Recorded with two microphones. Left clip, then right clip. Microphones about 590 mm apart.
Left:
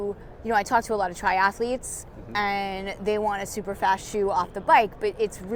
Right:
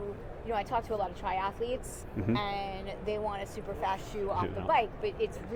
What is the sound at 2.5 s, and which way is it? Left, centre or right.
Speech, left.